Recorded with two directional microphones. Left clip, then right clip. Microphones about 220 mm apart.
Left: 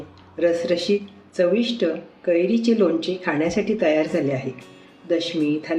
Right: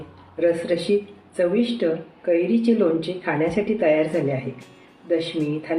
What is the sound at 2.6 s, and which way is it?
Speech, 25° left (ahead or behind).